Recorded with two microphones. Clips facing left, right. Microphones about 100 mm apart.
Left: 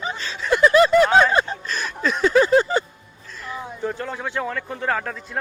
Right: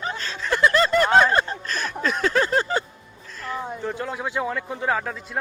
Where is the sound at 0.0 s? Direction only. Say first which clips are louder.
Left 1 dB; centre (ahead or behind).